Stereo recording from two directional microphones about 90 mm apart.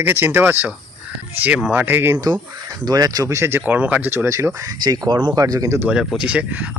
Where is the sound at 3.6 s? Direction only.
15° right (ahead or behind); by 4.7 s 35° right (ahead or behind).